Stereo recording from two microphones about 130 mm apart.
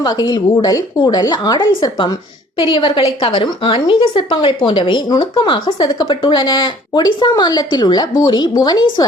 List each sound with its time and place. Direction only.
0.0 s speech: 30° left (ahead or behind)